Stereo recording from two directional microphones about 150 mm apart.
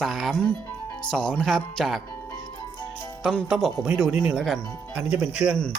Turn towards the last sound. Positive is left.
turn(degrees=-5)  # may be behind; listen again after turning